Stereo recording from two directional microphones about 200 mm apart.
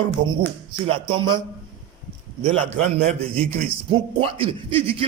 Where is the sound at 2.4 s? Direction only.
30° right (ahead or behind).